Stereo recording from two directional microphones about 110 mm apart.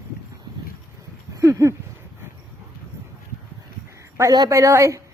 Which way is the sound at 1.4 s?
30° right (ahead or behind).